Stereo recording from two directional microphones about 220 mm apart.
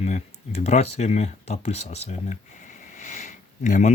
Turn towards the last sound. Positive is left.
turn(degrees=35)  # may be behind; listen again after turning